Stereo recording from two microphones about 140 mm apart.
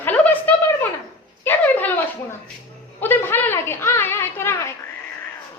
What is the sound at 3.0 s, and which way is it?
A woman's voice, 15° left (ahead or behind).